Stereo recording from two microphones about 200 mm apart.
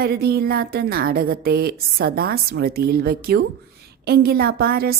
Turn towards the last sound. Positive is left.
turn(degrees=-50)  # may be behind; listen again after turning